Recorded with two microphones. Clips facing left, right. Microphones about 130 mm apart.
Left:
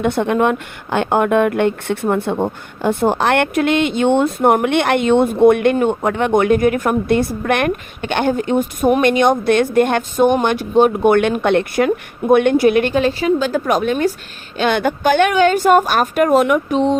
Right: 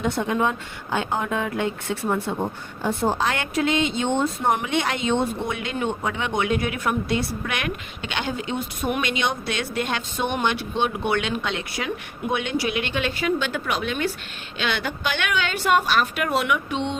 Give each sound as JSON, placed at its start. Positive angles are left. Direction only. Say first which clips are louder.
{"t": 0.0, "sound": "a woman's voice", "louder": "left 7 dB", "side_deg": 60}